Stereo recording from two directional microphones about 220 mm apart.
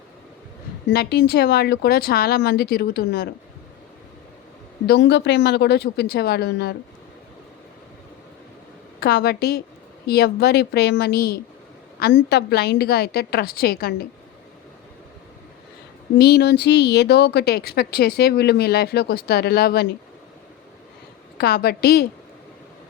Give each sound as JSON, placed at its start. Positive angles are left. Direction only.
{"t": 0.9, "sound": "speech", "side_deg": 50}
{"t": 4.9, "sound": "speech", "side_deg": 50}
{"t": 9.0, "sound": "speech", "side_deg": 45}
{"t": 16.1, "sound": "speech", "side_deg": 45}
{"t": 21.3, "sound": "speech", "side_deg": 45}